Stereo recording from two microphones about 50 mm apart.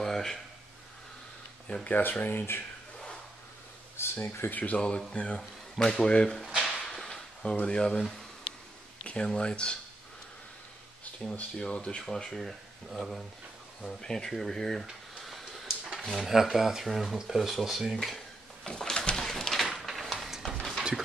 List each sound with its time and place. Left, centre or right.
0.0 s a sound: centre
1.9 s speech: left
3.9 s speech: left
4.5 s speech: left
4.8 s speech: centre
6.6 s a sound: centre
7.6 s speech: centre
11.5 s speech: centre
12.0 s speech: centre
14.9 s a sound: centre
16.1 s speech: centre
18.0 s dishes: centre
18.7 s a sound: centre